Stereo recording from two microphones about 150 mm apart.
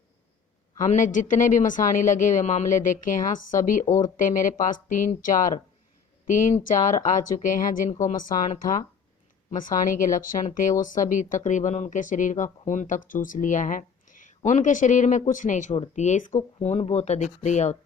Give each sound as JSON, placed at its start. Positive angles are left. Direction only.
{"t": 0.8, "sound": "speech", "side_deg": 60}